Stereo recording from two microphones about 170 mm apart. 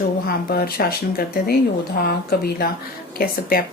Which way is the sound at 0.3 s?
60° left (ahead or behind).